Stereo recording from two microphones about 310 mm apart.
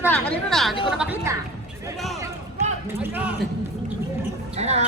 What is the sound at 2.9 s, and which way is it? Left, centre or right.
Speech, centre.